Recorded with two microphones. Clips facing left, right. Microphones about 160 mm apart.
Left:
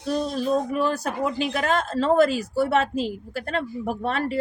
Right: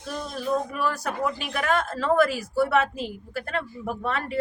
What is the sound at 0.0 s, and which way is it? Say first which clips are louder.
Speech: left 7 dB; 35° left (ahead or behind).